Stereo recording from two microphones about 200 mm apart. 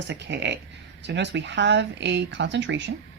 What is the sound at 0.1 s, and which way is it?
Speech, 60° right (ahead or behind).